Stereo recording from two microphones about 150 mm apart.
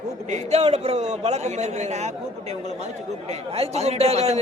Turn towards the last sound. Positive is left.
turn(degrees=-45)  # may be behind; listen again after turning